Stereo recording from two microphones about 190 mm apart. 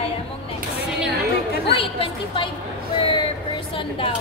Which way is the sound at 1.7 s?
30° left (ahead or behind).